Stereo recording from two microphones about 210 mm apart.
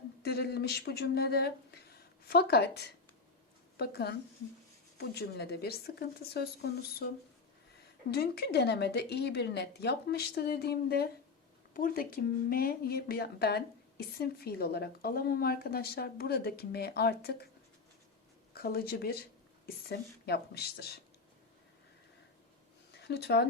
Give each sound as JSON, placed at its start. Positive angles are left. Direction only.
{"t": 0.2, "sound": "speech", "side_deg": 50}
{"t": 8.1, "sound": "speech", "side_deg": 50}
{"t": 18.5, "sound": "speech", "side_deg": 50}
{"t": 23.0, "sound": "speech", "side_deg": 50}